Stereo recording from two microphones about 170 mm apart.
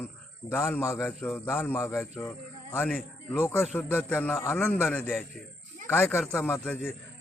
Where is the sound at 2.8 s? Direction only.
Centre (ahead or behind).